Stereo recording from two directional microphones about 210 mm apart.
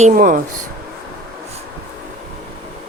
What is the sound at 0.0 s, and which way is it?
Speech, 40° right (ahead or behind).